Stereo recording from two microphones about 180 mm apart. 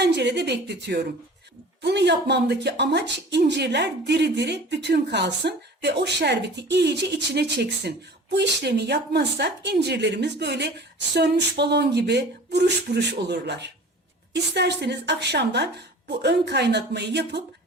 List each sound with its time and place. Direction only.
0.0 s speech: 70° right (ahead or behind)